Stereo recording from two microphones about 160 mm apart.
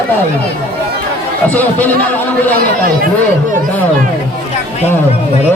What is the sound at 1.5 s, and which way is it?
Speech, 10° left (ahead or behind).